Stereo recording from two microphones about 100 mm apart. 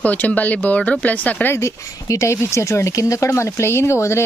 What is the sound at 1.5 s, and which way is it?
Speech, 30° left (ahead or behind).